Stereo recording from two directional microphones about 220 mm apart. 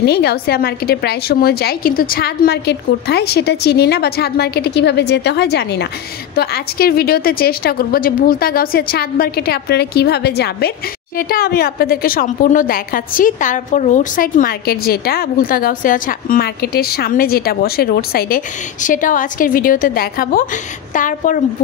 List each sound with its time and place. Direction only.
0.0 s a woman's voice: 50° left (ahead or behind)